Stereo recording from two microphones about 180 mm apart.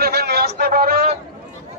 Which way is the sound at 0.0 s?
60° right (ahead or behind).